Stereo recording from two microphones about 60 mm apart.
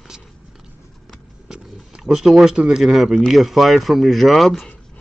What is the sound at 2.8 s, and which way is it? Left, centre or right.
Speech, centre.